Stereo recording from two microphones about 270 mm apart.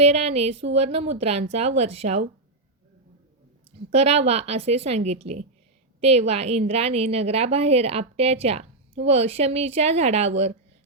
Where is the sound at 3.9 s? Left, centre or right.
Right.